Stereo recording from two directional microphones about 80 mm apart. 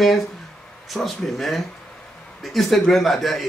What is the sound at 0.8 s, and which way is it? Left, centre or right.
A man's voice, centre.